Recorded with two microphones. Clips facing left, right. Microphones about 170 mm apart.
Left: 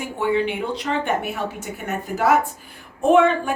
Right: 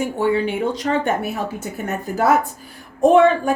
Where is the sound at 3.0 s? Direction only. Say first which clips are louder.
Right 3 dB; 35° right (ahead or behind).